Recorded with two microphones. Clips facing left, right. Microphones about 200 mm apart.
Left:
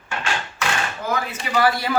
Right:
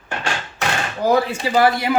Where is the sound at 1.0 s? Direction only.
30° right (ahead or behind).